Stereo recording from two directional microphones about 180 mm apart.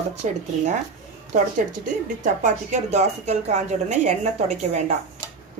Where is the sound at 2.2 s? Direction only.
45° right (ahead or behind).